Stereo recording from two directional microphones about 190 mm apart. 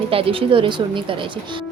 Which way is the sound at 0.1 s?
30° right (ahead or behind).